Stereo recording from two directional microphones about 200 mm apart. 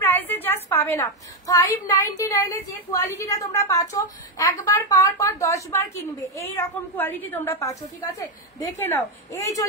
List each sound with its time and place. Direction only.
0.0 s a woman's voice: 10° left (ahead or behind)